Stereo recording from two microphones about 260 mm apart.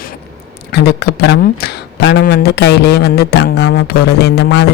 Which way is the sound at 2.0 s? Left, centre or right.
Left.